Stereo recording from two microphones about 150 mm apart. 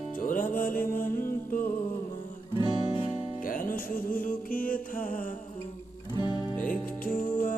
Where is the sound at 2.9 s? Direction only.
10° right (ahead or behind).